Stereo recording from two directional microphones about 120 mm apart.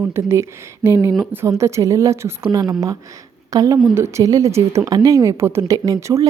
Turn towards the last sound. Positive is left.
turn(degrees=-25)  # may be behind; listen again after turning